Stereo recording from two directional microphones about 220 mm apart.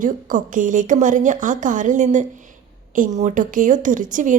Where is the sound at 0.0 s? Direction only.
35° right (ahead or behind).